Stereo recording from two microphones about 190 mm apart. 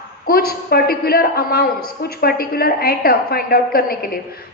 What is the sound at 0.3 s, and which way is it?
A woman's voice, 50° left (ahead or behind).